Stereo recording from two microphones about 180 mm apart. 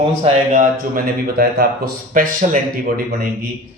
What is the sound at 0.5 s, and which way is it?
Speech, 50° right (ahead or behind).